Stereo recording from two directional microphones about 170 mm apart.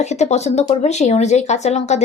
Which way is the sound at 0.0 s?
40° left (ahead or behind).